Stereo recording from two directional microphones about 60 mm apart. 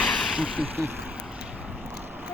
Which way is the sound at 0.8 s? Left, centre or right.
Right.